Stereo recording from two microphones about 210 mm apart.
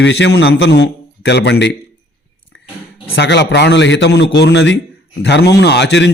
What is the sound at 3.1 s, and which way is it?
A man's voice, 55° left (ahead or behind).